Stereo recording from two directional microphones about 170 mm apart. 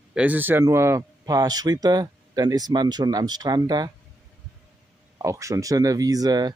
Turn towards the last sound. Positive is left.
turn(degrees=-25)  # may be behind; listen again after turning